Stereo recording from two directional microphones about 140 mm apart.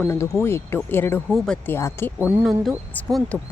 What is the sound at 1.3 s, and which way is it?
Speech, centre (ahead or behind).